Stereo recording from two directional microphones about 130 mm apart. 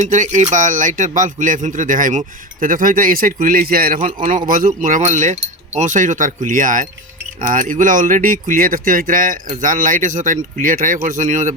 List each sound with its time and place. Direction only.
0.0 s speech: 75° right (ahead or behind)
0.5 s speech: 85° right